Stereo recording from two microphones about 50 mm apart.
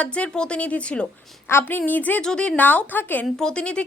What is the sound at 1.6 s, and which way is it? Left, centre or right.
Speech, left.